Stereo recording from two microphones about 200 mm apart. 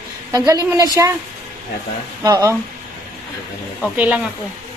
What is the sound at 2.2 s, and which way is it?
Speech, 20° right (ahead or behind).